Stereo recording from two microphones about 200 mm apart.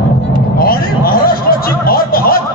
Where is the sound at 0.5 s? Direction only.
50° left (ahead or behind).